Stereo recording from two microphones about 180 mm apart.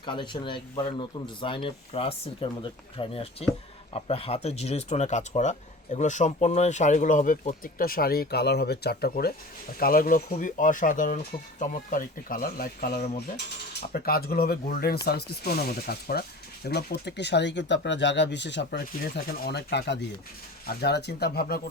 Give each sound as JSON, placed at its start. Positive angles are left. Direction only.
{"t": 0.0, "sound": "speech", "side_deg": 25}